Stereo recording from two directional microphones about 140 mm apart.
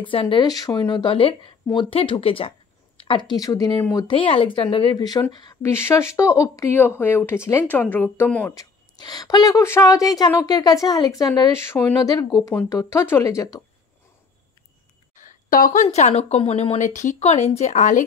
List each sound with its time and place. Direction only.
0.0 s speech: 40° left (ahead or behind)
4.1 s speech: 40° left (ahead or behind)
5.6 s a woman's voice: 20° left (ahead or behind)
8.5 s a woman's voice: 30° left (ahead or behind)
15.1 s speech: 70° left (ahead or behind)